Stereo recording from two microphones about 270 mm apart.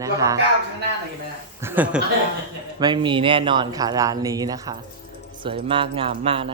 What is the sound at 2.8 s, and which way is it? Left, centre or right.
Speech, centre.